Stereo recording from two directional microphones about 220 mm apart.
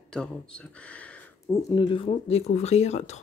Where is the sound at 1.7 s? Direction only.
20° left (ahead or behind).